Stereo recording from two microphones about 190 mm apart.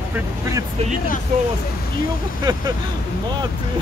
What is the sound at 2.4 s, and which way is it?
Speech, 20° right (ahead or behind).